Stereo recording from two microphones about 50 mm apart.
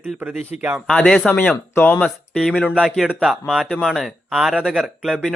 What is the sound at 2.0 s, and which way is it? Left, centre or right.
Speech, centre.